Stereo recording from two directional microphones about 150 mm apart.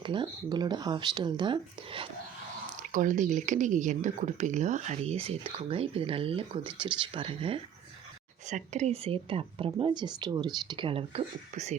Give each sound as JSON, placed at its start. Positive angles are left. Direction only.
{"t": 0.0, "sound": "speech", "side_deg": -30}
{"t": 2.9, "sound": "speech", "side_deg": -60}
{"t": 8.4, "sound": "speech", "side_deg": -50}